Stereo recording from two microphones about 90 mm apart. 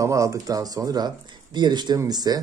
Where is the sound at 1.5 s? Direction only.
55° right (ahead or behind).